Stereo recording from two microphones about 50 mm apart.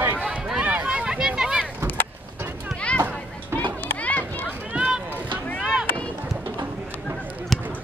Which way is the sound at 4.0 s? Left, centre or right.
Left.